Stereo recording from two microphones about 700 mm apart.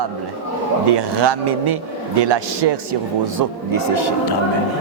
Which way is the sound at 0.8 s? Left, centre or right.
Right.